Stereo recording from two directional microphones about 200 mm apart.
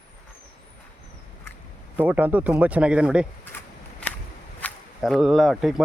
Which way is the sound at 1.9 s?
10° right (ahead or behind).